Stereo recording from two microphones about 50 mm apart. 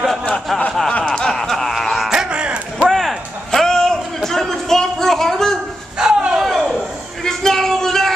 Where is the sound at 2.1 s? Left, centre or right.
Centre.